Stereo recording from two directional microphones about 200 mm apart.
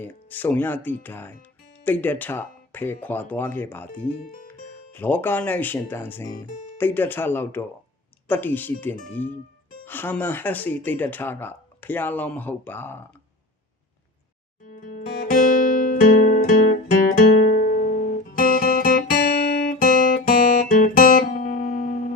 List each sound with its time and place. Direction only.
0.0 s speech: 10° left (ahead or behind)
14.7 s music: 40° left (ahead or behind)
18.3 s guitar: 45° left (ahead or behind)